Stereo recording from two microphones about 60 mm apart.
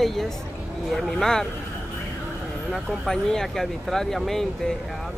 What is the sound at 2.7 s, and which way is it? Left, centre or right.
Speech, centre.